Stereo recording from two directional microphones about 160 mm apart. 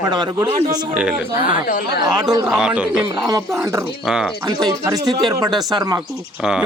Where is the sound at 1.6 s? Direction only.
80° left.